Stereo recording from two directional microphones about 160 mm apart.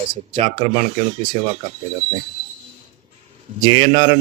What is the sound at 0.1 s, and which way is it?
Speech, 35° right (ahead or behind).